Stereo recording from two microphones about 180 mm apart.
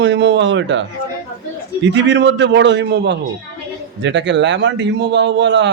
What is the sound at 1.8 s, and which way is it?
A man's voice, 80° right.